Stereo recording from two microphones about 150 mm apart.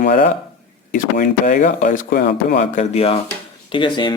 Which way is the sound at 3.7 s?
30° left (ahead or behind).